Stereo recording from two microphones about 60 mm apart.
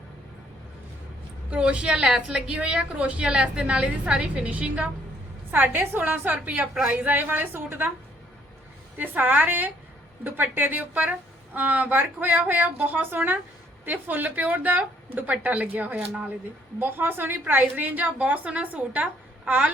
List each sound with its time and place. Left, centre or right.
1.5 s a woman's voice: right
5.5 s a woman's voice: right
9.0 s a woman's voice: right